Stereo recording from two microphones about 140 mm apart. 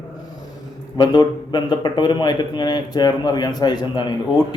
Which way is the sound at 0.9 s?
30° left (ahead or behind).